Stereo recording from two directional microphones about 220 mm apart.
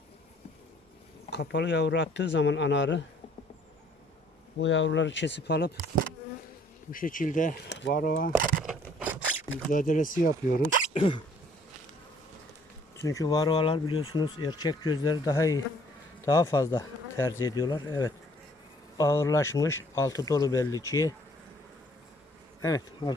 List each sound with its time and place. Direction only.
1.3 s speech: 50° left (ahead or behind)
4.5 s speech: 60° left (ahead or behind)
6.9 s speech: 40° left (ahead or behind)
7.7 s speech: 50° left (ahead or behind)
8.4 s speech: 40° right (ahead or behind)
8.6 s a sound: 5° right (ahead or behind)
9.6 s speech: 35° left (ahead or behind)
10.9 s speech: 25° left (ahead or behind)
13.0 s speech: 15° left (ahead or behind)
22.6 s speech: 20° left (ahead or behind)